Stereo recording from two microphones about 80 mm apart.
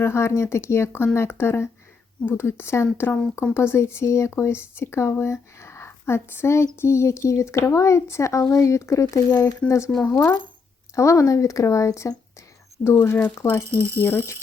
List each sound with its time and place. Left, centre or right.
0.0 s speech: left
13.1 s speech: centre
14.0 s speech: left